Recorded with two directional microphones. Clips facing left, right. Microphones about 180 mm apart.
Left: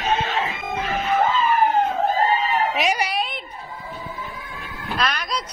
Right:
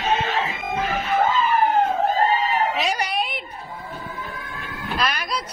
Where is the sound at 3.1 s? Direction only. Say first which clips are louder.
Even; centre (ahead or behind).